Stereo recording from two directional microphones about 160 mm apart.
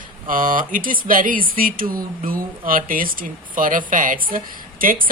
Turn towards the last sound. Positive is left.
turn(degrees=-60)  # may be behind; listen again after turning